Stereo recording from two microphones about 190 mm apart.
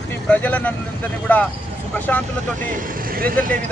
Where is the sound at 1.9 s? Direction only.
10° left (ahead or behind).